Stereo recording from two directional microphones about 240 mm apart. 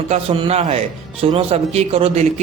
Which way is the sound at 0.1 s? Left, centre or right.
Right.